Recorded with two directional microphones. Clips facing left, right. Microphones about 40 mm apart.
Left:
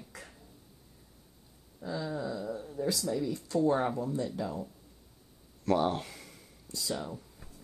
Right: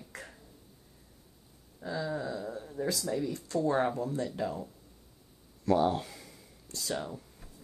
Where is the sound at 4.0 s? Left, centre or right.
Right.